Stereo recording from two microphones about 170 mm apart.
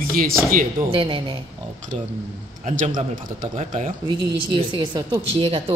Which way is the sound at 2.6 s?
45° right (ahead or behind).